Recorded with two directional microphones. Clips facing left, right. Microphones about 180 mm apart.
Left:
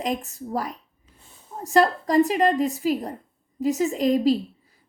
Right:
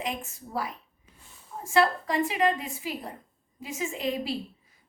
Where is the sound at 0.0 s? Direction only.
40° left (ahead or behind).